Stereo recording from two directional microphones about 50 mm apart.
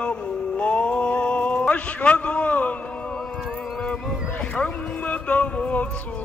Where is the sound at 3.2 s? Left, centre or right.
Centre.